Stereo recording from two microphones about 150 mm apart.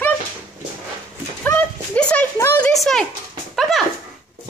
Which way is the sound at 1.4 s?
10° left (ahead or behind).